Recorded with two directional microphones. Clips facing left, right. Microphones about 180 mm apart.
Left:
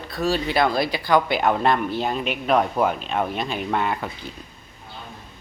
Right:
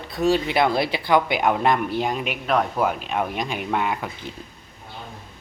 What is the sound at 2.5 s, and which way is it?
Speech, centre (ahead or behind).